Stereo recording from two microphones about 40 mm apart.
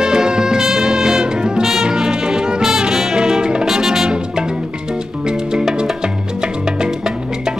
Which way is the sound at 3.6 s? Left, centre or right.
Centre.